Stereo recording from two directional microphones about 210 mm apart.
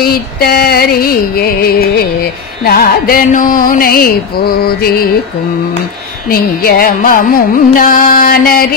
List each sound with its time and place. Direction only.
0.0 s carnatic music: 45° left (ahead or behind)
6.2 s carnatic music: 45° left (ahead or behind)